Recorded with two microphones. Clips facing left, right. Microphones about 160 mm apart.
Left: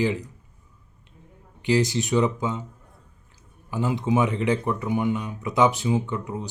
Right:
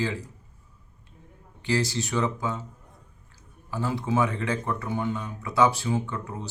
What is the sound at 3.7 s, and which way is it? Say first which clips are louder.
Speech: left 4 dB; 15° left (ahead or behind).